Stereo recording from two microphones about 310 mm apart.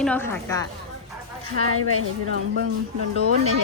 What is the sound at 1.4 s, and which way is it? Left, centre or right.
Speech, left.